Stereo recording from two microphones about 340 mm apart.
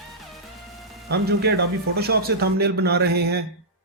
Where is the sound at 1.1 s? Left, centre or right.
Right.